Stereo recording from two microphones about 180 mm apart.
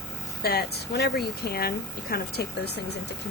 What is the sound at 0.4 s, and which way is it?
Speech, 60° left (ahead or behind).